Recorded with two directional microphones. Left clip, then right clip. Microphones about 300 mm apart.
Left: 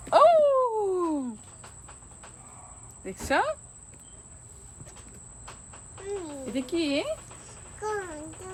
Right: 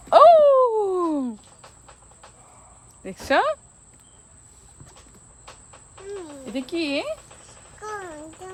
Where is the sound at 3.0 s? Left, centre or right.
Right.